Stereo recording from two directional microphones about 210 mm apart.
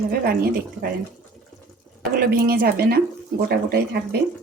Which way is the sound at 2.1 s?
40° right (ahead or behind).